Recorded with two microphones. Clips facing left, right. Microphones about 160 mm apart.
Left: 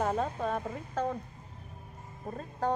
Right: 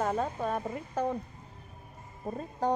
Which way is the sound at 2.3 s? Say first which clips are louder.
Right 2 dB; 15° right (ahead or behind).